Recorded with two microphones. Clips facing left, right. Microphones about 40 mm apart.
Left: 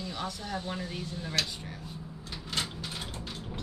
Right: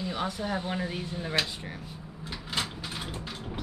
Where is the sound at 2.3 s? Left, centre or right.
Centre.